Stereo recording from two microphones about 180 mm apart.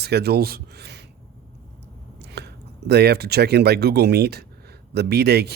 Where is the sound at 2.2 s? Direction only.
65° right (ahead or behind).